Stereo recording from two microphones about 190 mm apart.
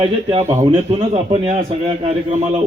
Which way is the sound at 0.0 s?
30° right (ahead or behind).